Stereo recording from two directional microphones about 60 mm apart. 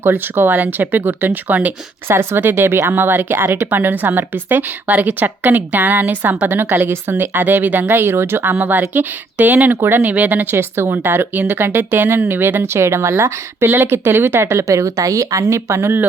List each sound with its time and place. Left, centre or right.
0.0 s speech: right
2.0 s a woman's voice: right
10.0 s speech: right
14.7 s speech: right